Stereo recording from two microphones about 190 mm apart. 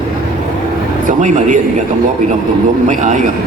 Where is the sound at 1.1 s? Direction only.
40° right (ahead or behind).